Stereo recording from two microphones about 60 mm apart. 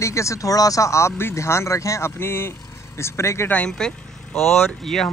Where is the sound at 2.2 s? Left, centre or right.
Left.